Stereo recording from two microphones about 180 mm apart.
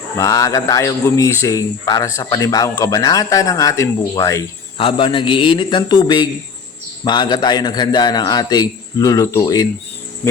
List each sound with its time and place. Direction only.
0.2 s speech: 20° left (ahead or behind)
4.8 s a man's voice: 30° left (ahead or behind)